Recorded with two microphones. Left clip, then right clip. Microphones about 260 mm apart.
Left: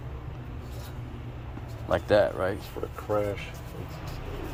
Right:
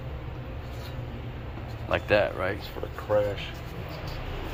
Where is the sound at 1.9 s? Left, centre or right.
Left.